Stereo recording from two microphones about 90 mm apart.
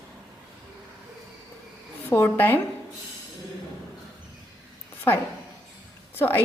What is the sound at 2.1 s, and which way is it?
Speech, 25° left (ahead or behind).